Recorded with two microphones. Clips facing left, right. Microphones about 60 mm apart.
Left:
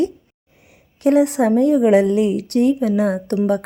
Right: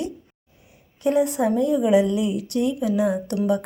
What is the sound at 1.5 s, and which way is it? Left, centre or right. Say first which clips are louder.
A woman's voice: left 6 dB; left.